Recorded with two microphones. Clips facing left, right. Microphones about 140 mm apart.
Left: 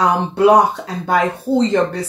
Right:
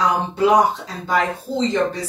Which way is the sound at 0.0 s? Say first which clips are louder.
Left 4 dB; 65° left (ahead or behind).